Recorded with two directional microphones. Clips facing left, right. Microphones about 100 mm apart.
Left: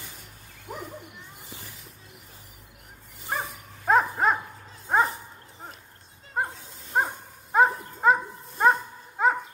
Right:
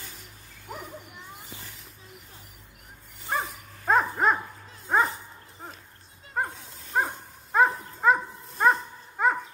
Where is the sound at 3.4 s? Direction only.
5° left (ahead or behind).